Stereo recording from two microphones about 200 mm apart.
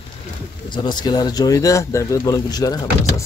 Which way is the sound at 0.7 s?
20° left (ahead or behind).